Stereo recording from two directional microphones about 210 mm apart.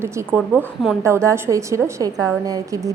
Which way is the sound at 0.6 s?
Centre (ahead or behind).